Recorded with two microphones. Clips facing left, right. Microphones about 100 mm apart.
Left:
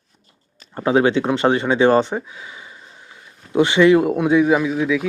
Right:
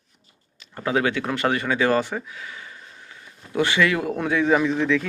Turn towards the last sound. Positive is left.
turn(degrees=10)  # may be behind; listen again after turning